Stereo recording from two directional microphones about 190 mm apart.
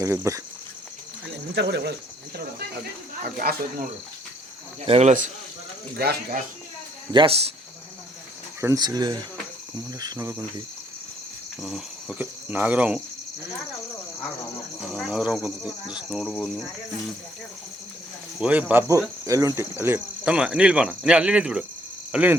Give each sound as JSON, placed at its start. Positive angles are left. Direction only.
{"t": 0.0, "sound": "speech", "side_deg": -15}
{"t": 1.5, "sound": "speech", "side_deg": -65}
{"t": 4.9, "sound": "speech", "side_deg": -35}
{"t": 6.0, "sound": "speech", "side_deg": -55}
{"t": 7.1, "sound": "speech", "side_deg": -30}
{"t": 8.6, "sound": "speech", "side_deg": -15}
{"t": 11.6, "sound": "speech", "side_deg": -5}
{"t": 14.8, "sound": "speech", "side_deg": -5}
{"t": 18.3, "sound": "speech", "side_deg": -5}
{"t": 22.1, "sound": "cricket", "side_deg": -10}